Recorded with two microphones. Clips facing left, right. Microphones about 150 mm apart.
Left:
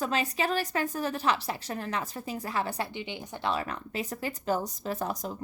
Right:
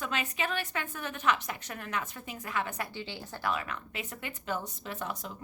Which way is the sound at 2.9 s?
20° left (ahead or behind).